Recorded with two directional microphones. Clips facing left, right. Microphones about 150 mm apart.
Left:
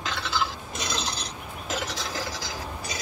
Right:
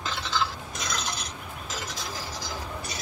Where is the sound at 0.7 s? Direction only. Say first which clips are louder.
Left 2 dB; 30° left (ahead or behind).